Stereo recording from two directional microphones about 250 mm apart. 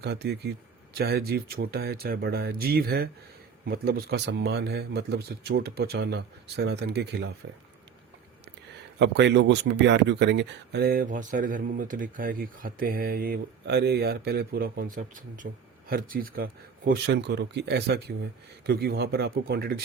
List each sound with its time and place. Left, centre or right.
0.0 s speech: right
9.0 s speech: right